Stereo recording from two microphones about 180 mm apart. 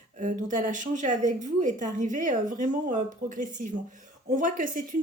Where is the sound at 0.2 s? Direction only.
45° right (ahead or behind).